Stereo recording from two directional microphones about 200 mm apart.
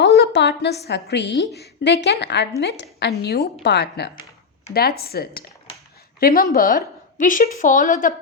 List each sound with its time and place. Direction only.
0.0 s a woman's voice: 60° left (ahead or behind); by 8.1 s 40° left (ahead or behind)